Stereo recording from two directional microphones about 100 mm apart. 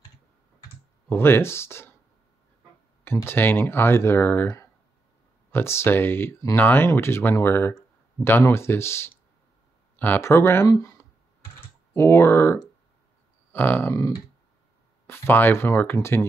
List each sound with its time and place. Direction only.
1.0 s speech: 25° left (ahead or behind)
3.3 s speech: 20° left (ahead or behind)
5.5 s speech: 25° left (ahead or behind)
11.9 s speech: 25° left (ahead or behind)
15.0 s speech: 20° left (ahead or behind)